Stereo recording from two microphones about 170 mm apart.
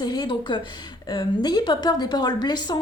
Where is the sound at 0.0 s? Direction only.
25° left (ahead or behind).